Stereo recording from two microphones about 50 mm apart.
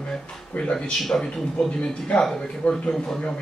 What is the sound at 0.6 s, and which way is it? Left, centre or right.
Speech, centre.